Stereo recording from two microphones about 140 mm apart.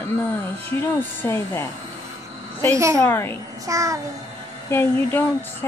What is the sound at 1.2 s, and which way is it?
Speech, 20° left (ahead or behind).